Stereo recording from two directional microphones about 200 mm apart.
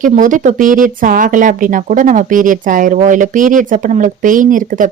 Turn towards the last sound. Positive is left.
turn(degrees=-40)  # may be behind; listen again after turning